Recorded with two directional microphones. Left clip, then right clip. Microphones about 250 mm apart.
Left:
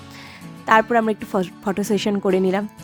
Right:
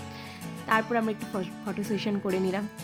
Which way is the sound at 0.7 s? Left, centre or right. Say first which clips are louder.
Left 10 dB; left.